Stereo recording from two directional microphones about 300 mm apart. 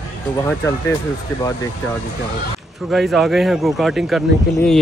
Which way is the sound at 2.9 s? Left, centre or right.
Centre.